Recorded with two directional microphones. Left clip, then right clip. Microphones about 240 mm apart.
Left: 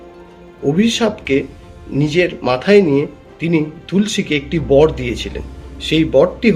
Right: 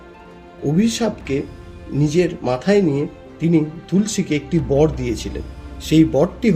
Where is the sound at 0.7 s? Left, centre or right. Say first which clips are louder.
Left 3 dB; right.